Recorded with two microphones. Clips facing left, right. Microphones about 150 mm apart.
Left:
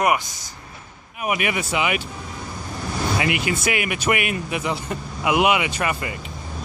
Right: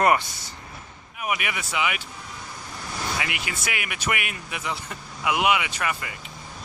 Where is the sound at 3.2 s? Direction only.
20° left (ahead or behind).